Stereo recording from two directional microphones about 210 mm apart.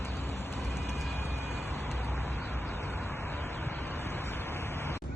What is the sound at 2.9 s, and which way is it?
Vehicle, 10° left (ahead or behind).